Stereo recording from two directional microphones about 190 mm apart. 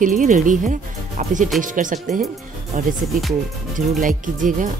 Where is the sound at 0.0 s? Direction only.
45° right (ahead or behind).